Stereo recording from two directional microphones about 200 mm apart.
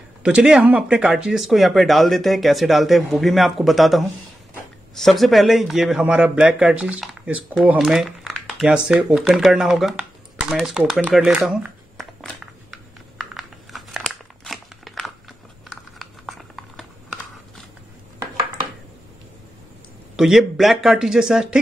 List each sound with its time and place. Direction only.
0.2 s a man's voice: 5° right (ahead or behind)
11.1 s a sound: 5° right (ahead or behind)
20.2 s a man's voice: centre (ahead or behind)